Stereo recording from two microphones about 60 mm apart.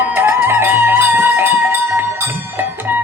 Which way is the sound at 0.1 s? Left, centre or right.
Right.